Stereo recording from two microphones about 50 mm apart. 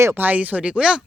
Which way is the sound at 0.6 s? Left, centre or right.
Centre.